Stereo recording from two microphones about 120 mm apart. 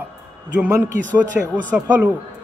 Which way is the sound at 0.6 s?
25° right (ahead or behind).